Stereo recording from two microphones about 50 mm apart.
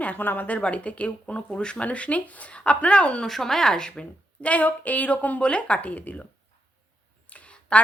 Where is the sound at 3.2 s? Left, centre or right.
Centre; by 6.2 s left.